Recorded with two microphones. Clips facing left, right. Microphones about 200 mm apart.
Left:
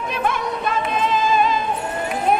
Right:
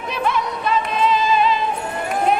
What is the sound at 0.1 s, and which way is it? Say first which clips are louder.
Music: right 2 dB; 50° left (ahead or behind).